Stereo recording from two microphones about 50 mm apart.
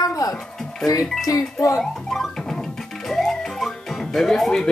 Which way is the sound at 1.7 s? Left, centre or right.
Centre.